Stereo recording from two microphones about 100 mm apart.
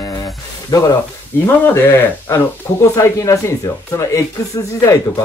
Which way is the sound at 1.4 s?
20° left (ahead or behind).